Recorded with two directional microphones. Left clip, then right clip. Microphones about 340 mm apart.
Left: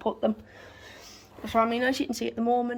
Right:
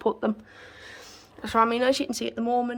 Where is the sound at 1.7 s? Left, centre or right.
Right.